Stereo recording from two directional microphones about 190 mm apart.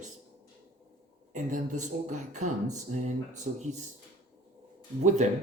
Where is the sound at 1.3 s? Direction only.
40° right (ahead or behind).